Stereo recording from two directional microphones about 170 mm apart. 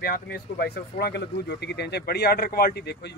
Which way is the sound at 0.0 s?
65° left (ahead or behind).